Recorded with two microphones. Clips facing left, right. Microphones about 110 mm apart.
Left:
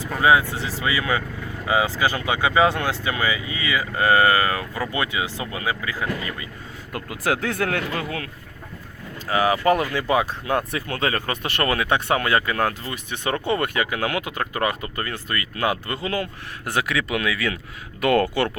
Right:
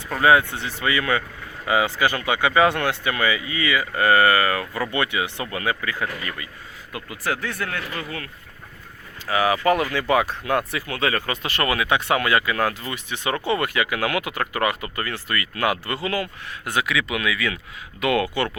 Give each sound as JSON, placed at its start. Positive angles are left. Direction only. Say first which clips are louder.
{"t": 0.1, "sound": "speech", "louder": "right 1 dB", "side_deg": 15}
{"t": 6.9, "sound": "speech", "louder": "left 3 dB", "side_deg": 55}
{"t": 9.3, "sound": "speech", "louder": "left 1 dB", "side_deg": 30}
{"t": 10.7, "sound": "speech", "louder": "even", "side_deg": 35}
{"t": 16.9, "sound": "speech", "louder": "even", "side_deg": 40}